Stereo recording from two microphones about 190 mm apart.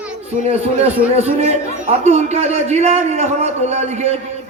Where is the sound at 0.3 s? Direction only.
35° right (ahead or behind).